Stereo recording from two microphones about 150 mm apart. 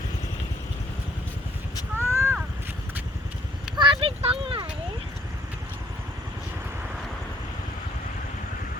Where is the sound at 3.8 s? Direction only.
35° right (ahead or behind).